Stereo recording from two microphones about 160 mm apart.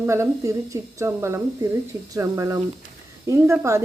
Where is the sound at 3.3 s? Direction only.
15° right (ahead or behind).